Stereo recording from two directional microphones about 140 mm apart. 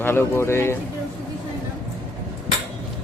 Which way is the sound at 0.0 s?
15° left (ahead or behind).